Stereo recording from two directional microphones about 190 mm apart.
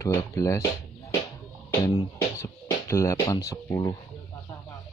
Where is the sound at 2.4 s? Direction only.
15° left (ahead or behind).